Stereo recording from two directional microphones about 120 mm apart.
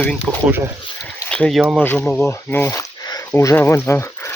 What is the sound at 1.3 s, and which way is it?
Speech, 5° left (ahead or behind).